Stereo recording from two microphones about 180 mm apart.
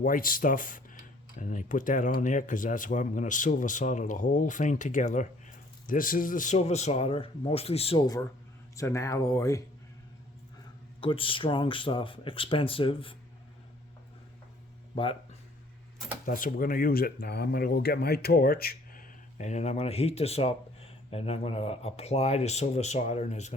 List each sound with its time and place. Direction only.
0.0 s speech: 50° left (ahead or behind); by 8.0 s 35° left (ahead or behind)
8.7 s speech: 15° left (ahead or behind)
11.0 s speech: 30° left (ahead or behind)
14.9 s speech: 30° left (ahead or behind)
16.2 s speech: 50° left (ahead or behind)